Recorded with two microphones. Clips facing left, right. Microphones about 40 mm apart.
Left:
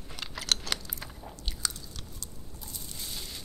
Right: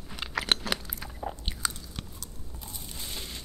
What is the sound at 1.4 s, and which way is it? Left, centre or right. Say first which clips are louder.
Biting: right 3 dB; right.